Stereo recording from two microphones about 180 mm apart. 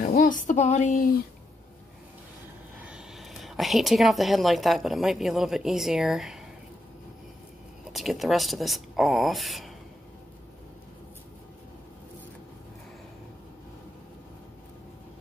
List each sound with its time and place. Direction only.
0.1 s speech: 50° left (ahead or behind)
2.8 s a woman's voice: 5° right (ahead or behind)
7.8 s speech: centre (ahead or behind)